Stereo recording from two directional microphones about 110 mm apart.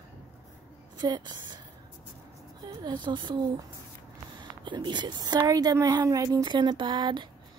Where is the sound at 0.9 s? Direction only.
40° right (ahead or behind).